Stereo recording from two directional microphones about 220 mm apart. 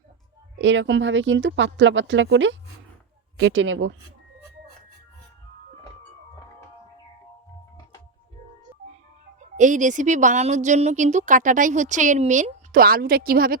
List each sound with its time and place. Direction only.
0.6 s speech: 55° right (ahead or behind)
9.6 s a woman's voice: 35° right (ahead or behind)